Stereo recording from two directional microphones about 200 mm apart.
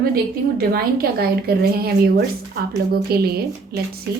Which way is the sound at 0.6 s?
50° right (ahead or behind).